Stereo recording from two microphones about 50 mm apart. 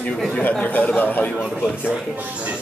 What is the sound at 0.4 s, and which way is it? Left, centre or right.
Speech, left.